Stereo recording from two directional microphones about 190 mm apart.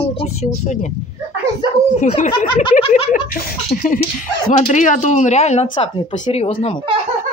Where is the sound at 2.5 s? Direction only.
25° left (ahead or behind).